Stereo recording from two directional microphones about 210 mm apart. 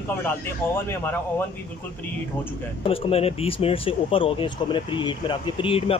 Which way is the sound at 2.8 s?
25° left (ahead or behind).